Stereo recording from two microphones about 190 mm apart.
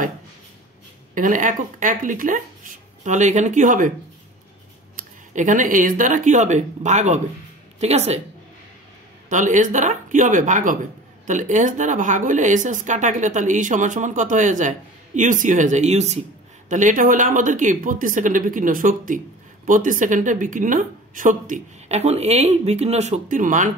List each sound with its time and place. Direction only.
1.1 s a woman's voice: 45° right (ahead or behind)
4.9 s speech: 40° right (ahead or behind)
9.3 s a woman's voice: 40° right (ahead or behind)